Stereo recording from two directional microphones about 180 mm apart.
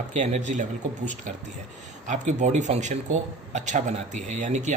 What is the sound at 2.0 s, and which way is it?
Speech, 40° right (ahead or behind).